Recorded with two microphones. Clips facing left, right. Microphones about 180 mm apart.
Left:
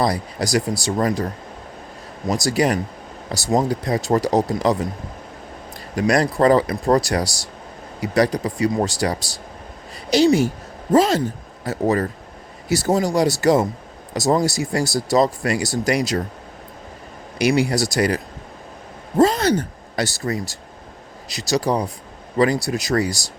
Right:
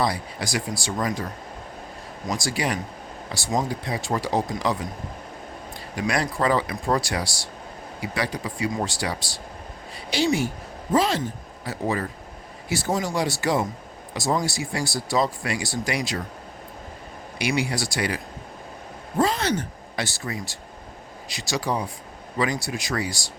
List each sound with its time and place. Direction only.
0.0 s speech: 40° left (ahead or behind)
2.3 s speech: 40° left (ahead or behind)
6.0 s speech: 40° left (ahead or behind)
17.3 s speech: 40° left (ahead or behind)
19.2 s speech: 40° left (ahead or behind)